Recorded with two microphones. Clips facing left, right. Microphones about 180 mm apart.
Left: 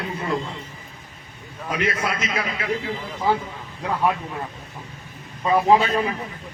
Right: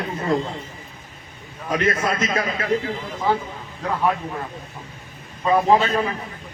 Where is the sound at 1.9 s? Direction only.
45° right (ahead or behind).